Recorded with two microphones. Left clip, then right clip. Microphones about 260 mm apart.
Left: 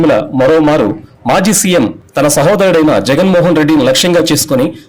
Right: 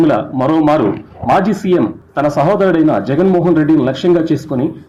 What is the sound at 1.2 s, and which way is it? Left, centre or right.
Speech, left.